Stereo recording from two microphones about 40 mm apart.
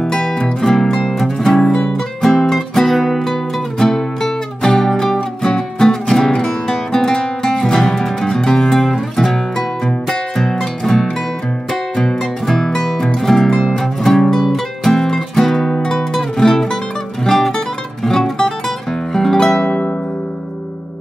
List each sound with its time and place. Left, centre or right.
0.0 s music: centre
3.8 s music: centre
19.6 s music: left